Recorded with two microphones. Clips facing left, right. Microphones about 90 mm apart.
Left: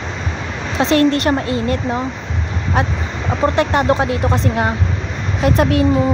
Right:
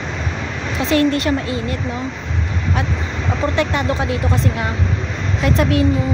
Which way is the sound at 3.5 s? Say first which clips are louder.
Left 5 dB; 50° left (ahead or behind).